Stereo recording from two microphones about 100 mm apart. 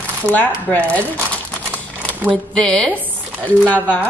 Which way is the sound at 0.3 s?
15° left (ahead or behind).